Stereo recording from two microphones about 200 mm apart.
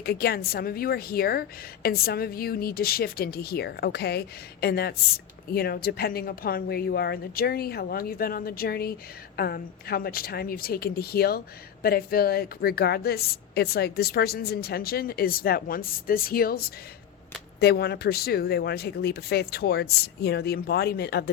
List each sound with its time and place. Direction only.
0.0 s speech: 50° left (ahead or behind)